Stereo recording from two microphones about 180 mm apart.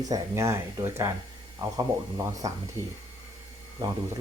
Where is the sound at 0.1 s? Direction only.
15° right (ahead or behind).